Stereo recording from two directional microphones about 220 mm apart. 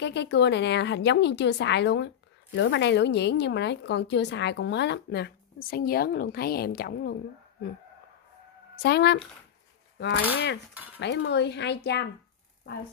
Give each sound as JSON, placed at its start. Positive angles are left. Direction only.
{"t": 0.0, "sound": "a woman's voice", "side_deg": 50}
{"t": 8.7, "sound": "a woman's voice", "side_deg": 50}
{"t": 10.3, "sound": "a woman's voice", "side_deg": 50}
{"t": 10.7, "sound": "speech", "side_deg": -10}
{"t": 11.0, "sound": "a woman's voice", "side_deg": 50}